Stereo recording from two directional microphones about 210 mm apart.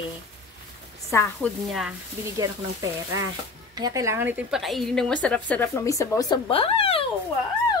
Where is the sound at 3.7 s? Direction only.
15° right (ahead or behind).